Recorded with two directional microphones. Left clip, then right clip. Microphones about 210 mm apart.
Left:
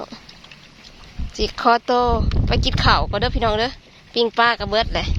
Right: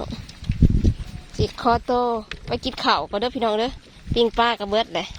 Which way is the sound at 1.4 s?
5° right (ahead or behind).